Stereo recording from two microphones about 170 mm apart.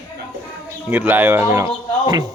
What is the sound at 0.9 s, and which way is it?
Speech, 10° right (ahead or behind).